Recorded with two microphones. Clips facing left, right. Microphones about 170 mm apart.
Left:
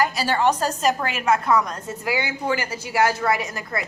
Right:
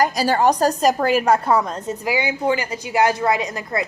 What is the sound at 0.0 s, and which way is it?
A woman's voice, 40° right (ahead or behind).